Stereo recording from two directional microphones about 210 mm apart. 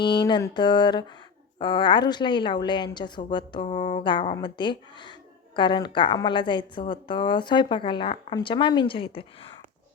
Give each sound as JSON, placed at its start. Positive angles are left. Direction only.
{"t": 0.0, "sound": "a woman's voice", "side_deg": 20}